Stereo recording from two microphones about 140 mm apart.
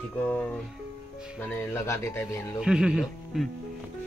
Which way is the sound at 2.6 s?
5° right (ahead or behind).